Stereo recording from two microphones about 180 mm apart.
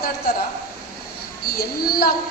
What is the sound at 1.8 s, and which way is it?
Speech, 55° left (ahead or behind).